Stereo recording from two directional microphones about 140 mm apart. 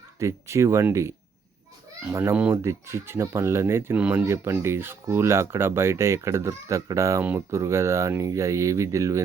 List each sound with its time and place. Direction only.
0.2 s speech: 20° right (ahead or behind)
2.1 s speech: 15° right (ahead or behind)